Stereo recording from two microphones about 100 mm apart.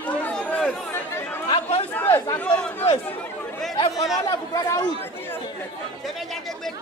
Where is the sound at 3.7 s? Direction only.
35° left (ahead or behind).